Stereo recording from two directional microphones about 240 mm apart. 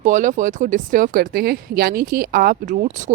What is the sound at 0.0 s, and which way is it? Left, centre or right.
Speech, right.